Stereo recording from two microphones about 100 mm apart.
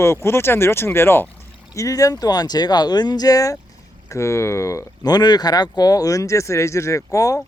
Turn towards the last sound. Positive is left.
turn(degrees=35)  # may be behind; listen again after turning